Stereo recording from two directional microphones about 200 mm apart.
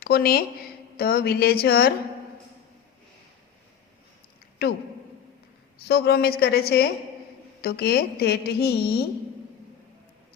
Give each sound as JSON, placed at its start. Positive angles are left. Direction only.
{"t": 0.0, "sound": "a woman's voice", "side_deg": 50}
{"t": 4.6, "sound": "a woman's voice", "side_deg": 50}
{"t": 5.9, "sound": "a woman's voice", "side_deg": 55}